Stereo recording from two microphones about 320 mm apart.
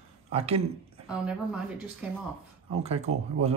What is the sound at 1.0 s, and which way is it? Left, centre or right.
A woman's voice, centre.